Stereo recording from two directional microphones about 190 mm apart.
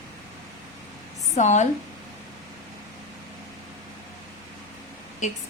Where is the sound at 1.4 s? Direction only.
40° left (ahead or behind).